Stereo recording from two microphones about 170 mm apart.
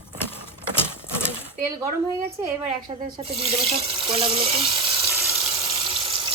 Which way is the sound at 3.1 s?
35° right (ahead or behind).